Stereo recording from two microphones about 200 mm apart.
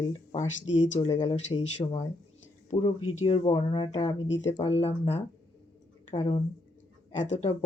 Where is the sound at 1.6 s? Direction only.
35° left (ahead or behind).